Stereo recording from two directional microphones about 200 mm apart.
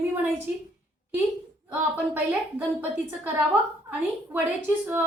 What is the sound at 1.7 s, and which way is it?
Speech, 10° right (ahead or behind).